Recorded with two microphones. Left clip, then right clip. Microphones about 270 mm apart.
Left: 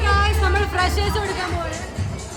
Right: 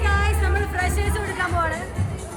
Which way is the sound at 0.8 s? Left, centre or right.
Centre.